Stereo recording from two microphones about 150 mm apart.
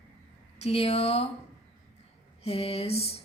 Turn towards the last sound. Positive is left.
turn(degrees=45)  # may be behind; listen again after turning